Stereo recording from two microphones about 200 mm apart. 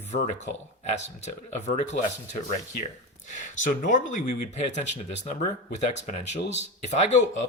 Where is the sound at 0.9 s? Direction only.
35° left (ahead or behind).